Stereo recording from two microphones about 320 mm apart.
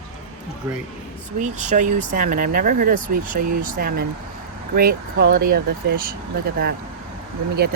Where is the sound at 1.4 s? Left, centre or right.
Right.